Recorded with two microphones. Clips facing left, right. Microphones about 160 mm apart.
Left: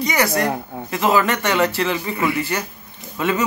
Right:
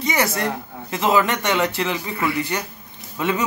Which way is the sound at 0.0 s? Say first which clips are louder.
Left 2 dB; 25° right (ahead or behind).